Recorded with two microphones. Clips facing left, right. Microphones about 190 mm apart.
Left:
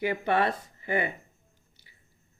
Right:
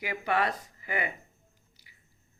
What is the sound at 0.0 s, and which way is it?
A woman's voice, 30° left (ahead or behind).